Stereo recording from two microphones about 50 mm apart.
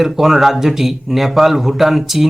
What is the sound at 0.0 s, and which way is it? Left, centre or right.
Speech, centre.